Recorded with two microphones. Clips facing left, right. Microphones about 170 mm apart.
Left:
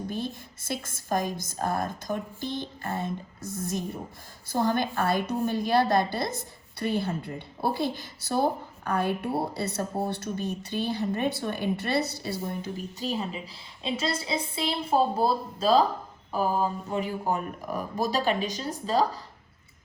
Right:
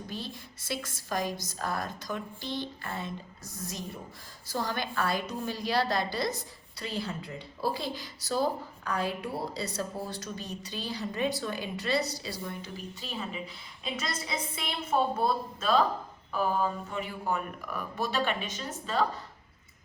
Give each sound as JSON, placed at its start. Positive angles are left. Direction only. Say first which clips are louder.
{"t": 0.1, "sound": "a woman's voice", "louder": "left 6 dB", "side_deg": 50}